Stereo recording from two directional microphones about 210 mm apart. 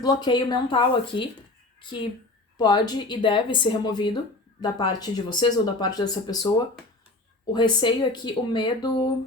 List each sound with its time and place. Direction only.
0.0 s speech: 20° left (ahead or behind)
7.5 s speech: 20° left (ahead or behind)